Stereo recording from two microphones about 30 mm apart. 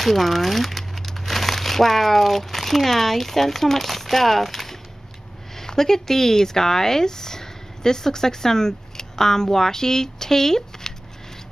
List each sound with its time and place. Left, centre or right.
0.0 s speech: centre